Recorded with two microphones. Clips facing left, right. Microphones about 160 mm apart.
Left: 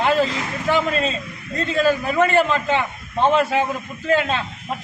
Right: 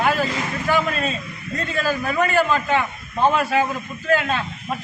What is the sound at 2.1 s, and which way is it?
A man's voice, 25° left (ahead or behind).